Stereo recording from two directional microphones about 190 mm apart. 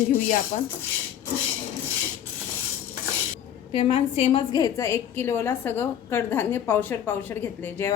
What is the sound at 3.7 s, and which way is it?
A woman's voice, 30° left (ahead or behind).